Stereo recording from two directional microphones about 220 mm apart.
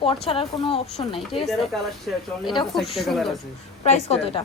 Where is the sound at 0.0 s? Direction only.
25° left (ahead or behind).